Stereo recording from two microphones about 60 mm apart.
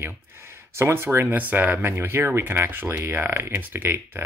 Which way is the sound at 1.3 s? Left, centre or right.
Right.